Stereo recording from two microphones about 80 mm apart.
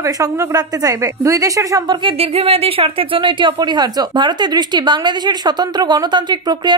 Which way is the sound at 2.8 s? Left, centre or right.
Right.